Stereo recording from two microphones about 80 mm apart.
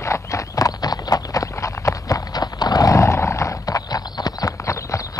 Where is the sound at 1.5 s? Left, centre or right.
Left.